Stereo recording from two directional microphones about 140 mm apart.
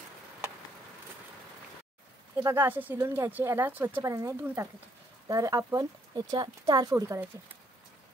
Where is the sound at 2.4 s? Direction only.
20° right (ahead or behind).